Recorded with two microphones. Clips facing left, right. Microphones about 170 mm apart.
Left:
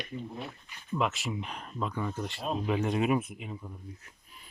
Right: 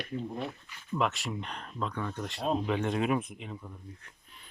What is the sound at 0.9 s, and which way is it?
Speech, centre (ahead or behind).